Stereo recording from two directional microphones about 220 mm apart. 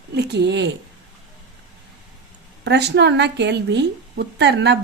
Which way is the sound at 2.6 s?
50° right (ahead or behind).